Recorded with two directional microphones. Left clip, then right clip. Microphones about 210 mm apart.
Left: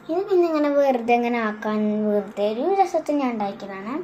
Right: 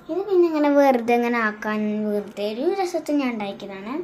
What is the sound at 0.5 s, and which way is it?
Speech, 30° right (ahead or behind).